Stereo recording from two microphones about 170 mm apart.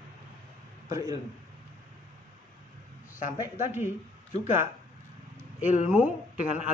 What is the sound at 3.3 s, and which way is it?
Speech, 15° right (ahead or behind).